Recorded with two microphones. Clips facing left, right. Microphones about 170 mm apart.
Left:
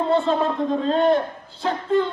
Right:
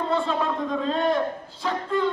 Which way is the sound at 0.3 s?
35° left (ahead or behind).